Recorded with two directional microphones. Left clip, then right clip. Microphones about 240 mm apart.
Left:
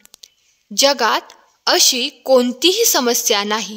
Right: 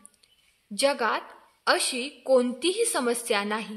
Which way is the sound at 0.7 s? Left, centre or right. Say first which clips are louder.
Left 10 dB; left.